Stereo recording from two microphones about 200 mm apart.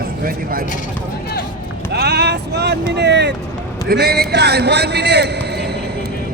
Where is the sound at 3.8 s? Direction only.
50° right (ahead or behind).